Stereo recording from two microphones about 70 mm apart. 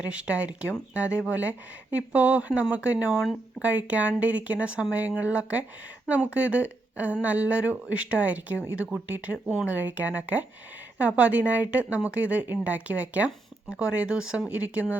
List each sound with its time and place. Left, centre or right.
0.0 s speech: centre